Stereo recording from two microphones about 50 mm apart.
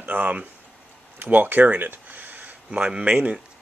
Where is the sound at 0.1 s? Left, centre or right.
Right.